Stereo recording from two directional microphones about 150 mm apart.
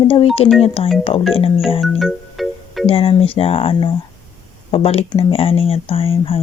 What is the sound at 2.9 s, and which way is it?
Speech, 40° left (ahead or behind).